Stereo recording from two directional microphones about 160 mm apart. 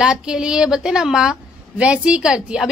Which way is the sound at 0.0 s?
5° right (ahead or behind).